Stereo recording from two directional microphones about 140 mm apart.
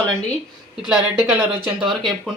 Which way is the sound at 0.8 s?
5° right (ahead or behind).